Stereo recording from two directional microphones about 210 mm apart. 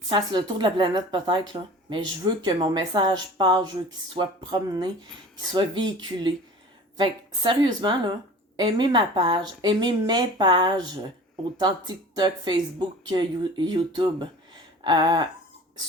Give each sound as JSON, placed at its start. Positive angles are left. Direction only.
{"t": 0.1, "sound": "speech", "side_deg": -20}